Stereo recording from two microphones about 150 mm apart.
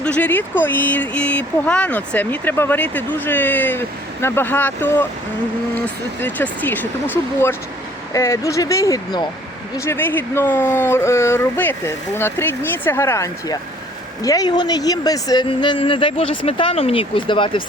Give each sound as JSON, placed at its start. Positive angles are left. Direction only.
{"t": 0.0, "sound": "speech", "side_deg": 10}